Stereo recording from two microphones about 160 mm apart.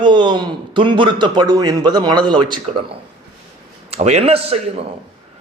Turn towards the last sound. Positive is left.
turn(degrees=-40)  # may be behind; listen again after turning